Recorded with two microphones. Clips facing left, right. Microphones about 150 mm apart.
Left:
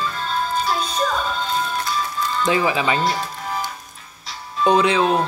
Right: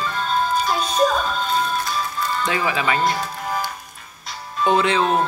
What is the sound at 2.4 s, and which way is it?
Speech, 20° left (ahead or behind).